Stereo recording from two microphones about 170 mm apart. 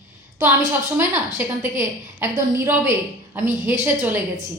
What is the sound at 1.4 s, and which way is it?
A man's voice, 15° right (ahead or behind).